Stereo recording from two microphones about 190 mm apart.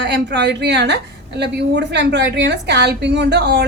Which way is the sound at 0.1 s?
65° right (ahead or behind).